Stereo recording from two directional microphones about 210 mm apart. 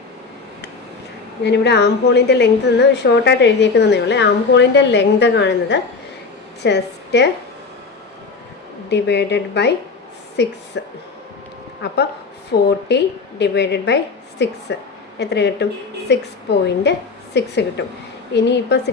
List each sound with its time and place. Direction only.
1.5 s a woman's voice: 50° left (ahead or behind)
8.9 s a woman's voice: 55° left (ahead or behind)
10.8 s speech: 55° left (ahead or behind)
12.5 s a woman's voice: 55° left (ahead or behind)